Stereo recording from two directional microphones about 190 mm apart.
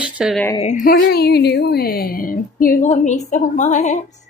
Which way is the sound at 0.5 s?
35° left (ahead or behind).